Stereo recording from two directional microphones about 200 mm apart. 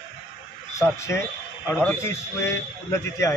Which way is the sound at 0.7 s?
15° left (ahead or behind).